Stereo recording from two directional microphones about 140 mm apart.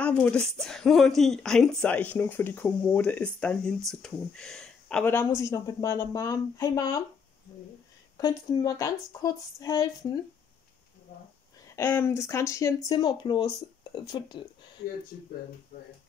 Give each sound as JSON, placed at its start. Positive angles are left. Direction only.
{"t": 0.0, "sound": "speech", "side_deg": 10}
{"t": 5.1, "sound": "a woman's voice", "side_deg": 20}
{"t": 8.2, "sound": "a woman's voice", "side_deg": 25}
{"t": 11.7, "sound": "a woman's voice", "side_deg": 20}